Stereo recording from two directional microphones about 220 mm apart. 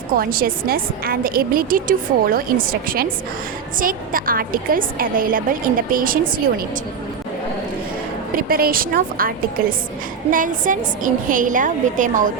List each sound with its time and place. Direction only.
0.2 s a woman's voice: 40° right (ahead or behind)
8.3 s a woman's voice: 40° right (ahead or behind)